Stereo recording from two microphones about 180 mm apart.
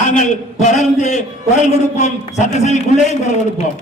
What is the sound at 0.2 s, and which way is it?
A man's voice, 40° left (ahead or behind).